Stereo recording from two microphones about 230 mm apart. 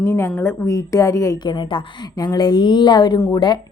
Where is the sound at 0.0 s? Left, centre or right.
Centre.